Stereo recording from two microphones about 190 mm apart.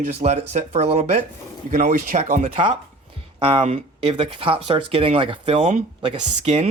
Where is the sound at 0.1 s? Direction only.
35° right (ahead or behind).